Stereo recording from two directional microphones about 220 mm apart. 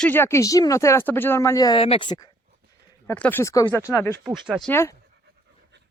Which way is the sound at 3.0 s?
5° left (ahead or behind).